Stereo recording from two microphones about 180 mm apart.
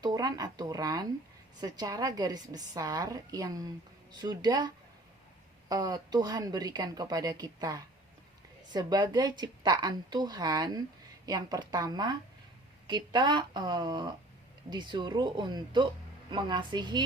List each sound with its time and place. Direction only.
0.0 s a woman's voice: 20° right (ahead or behind)